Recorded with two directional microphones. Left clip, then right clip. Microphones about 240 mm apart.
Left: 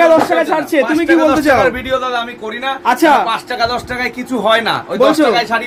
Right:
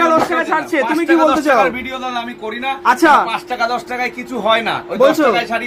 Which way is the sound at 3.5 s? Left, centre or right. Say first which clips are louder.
Left 2 dB; left.